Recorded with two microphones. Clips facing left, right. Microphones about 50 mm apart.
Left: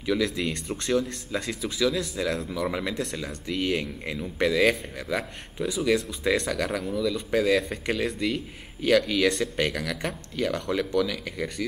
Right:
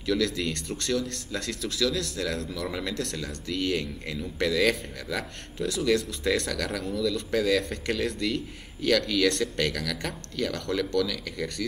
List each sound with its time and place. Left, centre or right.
0.0 s speech: centre